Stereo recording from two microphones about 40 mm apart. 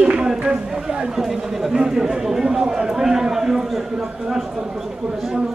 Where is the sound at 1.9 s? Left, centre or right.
Centre.